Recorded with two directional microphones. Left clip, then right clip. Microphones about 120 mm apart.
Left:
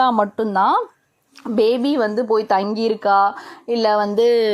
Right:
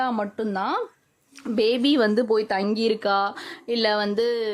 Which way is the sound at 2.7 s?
15° right (ahead or behind).